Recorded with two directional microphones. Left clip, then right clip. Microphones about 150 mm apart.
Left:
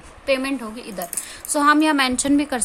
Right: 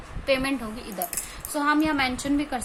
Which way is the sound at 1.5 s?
50° left (ahead or behind).